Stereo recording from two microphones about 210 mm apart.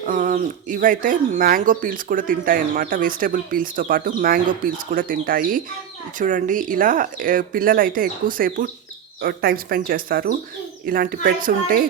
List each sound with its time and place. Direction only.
0.0 s speech: 40° right (ahead or behind)